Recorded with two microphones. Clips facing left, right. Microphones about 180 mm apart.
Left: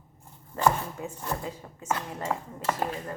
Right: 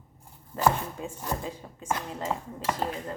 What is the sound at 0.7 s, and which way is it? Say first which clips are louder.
Speech: even; 20° right (ahead or behind).